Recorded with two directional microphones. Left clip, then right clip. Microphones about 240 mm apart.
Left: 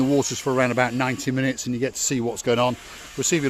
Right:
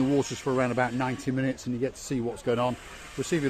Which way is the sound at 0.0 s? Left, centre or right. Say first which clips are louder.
Left 5 dB; left.